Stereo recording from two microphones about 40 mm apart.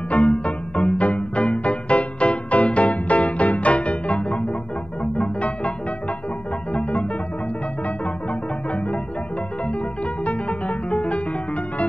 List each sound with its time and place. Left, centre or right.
0.1 s music: left
6.7 s music: left
10.2 s music: left